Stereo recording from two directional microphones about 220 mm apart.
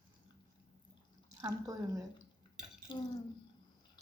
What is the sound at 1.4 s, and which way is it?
Speech, 15° right (ahead or behind).